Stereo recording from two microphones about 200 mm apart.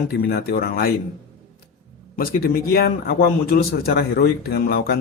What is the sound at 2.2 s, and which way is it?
A man's voice, 45° left (ahead or behind).